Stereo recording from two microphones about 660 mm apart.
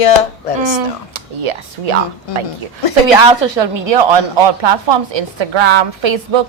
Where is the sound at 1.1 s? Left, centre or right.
Right.